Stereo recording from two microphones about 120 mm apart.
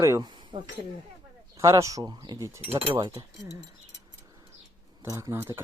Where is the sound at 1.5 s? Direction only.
25° right (ahead or behind).